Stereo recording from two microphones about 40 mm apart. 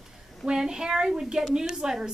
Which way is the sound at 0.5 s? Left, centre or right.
Centre.